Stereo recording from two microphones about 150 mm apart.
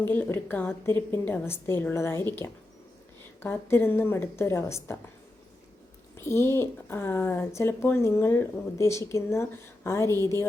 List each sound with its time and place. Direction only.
0.1 s speech: 15° left (ahead or behind)
3.4 s speech: 15° left (ahead or behind)
6.1 s speech: 15° left (ahead or behind)